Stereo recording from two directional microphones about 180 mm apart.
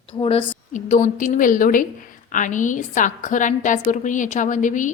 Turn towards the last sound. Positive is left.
turn(degrees=45)  # may be behind; listen again after turning